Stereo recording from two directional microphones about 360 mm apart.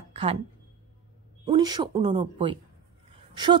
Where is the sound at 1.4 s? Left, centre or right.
Centre.